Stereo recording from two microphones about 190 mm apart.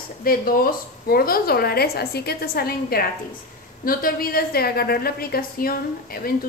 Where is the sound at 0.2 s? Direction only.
50° left (ahead or behind).